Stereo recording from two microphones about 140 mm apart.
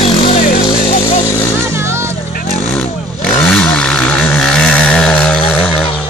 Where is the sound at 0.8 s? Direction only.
90° left.